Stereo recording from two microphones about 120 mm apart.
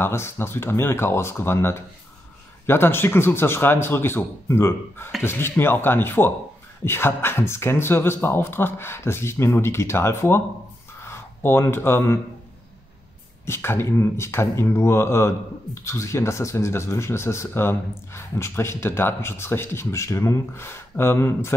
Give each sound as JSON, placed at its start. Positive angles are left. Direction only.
{"t": 0.0, "sound": "speech", "side_deg": 20}
{"t": 13.5, "sound": "speech", "side_deg": 20}